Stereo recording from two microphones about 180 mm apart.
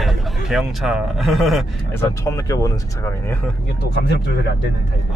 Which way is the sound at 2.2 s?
15° left (ahead or behind).